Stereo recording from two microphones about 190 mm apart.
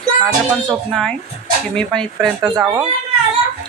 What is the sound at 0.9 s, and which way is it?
Speech, centre (ahead or behind).